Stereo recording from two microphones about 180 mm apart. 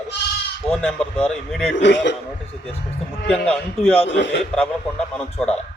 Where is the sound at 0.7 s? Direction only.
10° left (ahead or behind).